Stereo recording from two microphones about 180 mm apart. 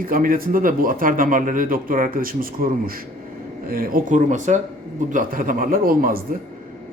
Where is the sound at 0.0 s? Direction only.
50° right (ahead or behind).